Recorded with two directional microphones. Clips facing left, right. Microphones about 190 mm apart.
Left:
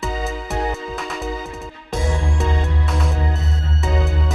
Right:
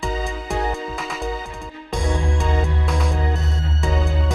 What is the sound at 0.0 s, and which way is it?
Music, centre (ahead or behind).